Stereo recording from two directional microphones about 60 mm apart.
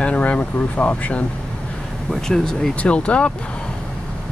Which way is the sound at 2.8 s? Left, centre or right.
Centre.